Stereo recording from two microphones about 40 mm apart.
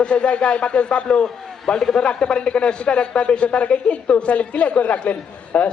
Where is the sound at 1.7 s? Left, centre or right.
Centre.